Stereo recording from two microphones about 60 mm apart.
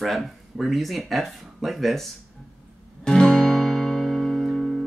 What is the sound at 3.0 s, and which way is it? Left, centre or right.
Music, centre.